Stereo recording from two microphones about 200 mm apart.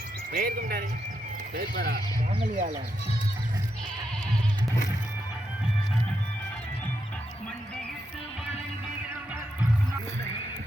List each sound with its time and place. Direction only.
0.3 s speech: 45° right (ahead or behind)
2.4 s speech: 40° right (ahead or behind)